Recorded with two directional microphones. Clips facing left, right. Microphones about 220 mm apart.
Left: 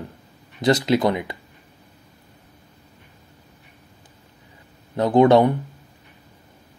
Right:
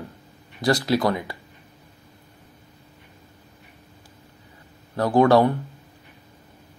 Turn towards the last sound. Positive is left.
turn(degrees=20)  # may be behind; listen again after turning